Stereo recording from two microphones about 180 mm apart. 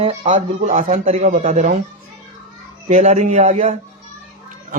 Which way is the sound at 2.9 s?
40° right (ahead or behind).